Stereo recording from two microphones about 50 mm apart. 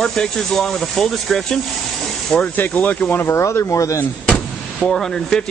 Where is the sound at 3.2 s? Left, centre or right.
Left.